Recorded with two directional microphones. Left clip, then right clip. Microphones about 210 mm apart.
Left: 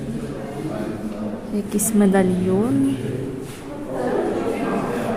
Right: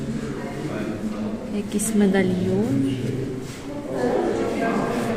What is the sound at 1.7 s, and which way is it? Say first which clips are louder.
Speech: left 3 dB; 25° left (ahead or behind).